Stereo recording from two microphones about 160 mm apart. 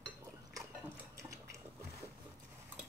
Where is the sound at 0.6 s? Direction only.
20° right (ahead or behind).